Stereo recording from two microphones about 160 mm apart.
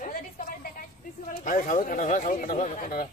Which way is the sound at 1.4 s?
60° left (ahead or behind).